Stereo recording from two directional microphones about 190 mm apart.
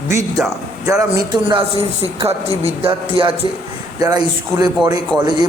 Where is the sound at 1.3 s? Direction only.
25° right (ahead or behind).